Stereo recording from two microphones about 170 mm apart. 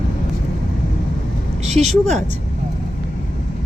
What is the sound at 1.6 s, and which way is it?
Speech, 40° right (ahead or behind).